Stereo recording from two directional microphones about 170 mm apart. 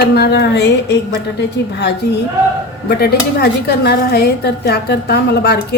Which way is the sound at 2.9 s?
70° left (ahead or behind).